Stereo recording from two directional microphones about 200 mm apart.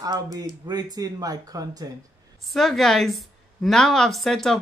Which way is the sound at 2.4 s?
Centre (ahead or behind).